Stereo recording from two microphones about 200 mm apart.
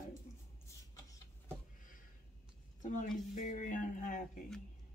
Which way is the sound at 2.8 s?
40° left (ahead or behind).